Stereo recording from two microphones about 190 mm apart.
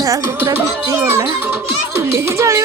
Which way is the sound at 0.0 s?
15° right (ahead or behind).